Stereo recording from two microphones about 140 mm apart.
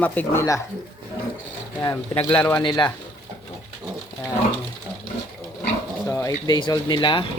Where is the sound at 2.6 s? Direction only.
35° left (ahead or behind).